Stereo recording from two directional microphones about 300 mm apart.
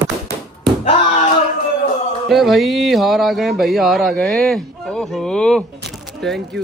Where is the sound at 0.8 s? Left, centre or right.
Left.